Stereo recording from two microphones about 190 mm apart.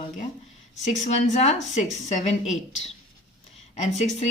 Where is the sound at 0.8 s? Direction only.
35° left (ahead or behind).